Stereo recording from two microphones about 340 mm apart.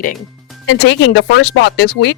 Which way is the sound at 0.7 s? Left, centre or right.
Left.